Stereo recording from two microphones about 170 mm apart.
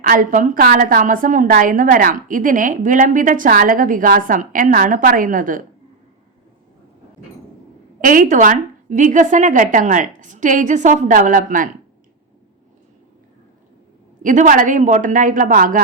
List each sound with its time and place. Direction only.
0.0 s a woman's voice: 55° right (ahead or behind)
8.0 s a woman's voice: 50° right (ahead or behind)
14.2 s a woman's voice: 50° right (ahead or behind)